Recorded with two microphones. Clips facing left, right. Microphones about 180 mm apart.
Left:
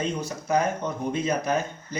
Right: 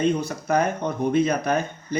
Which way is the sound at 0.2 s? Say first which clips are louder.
Right 2 dB; 60° right (ahead or behind).